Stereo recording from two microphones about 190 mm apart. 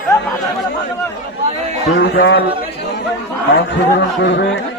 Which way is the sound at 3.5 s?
65° left (ahead or behind).